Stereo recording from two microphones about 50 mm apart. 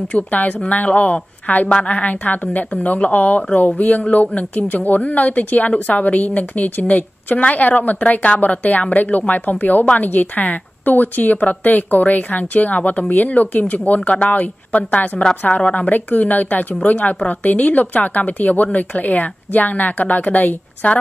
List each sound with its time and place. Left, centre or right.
0.1 s a woman's voice: left